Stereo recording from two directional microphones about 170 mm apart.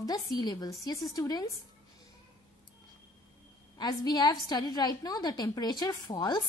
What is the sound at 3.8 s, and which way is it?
A woman's voice, 25° left (ahead or behind).